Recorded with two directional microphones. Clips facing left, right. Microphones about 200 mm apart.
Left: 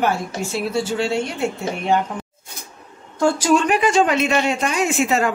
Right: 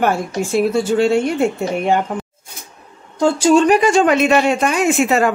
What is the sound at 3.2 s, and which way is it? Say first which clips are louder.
Speech: right 4 dB; 25° right (ahead or behind).